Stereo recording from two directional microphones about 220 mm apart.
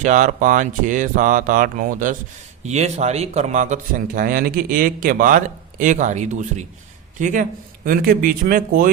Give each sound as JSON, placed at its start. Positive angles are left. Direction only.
{"t": 0.0, "sound": "speech", "side_deg": -35}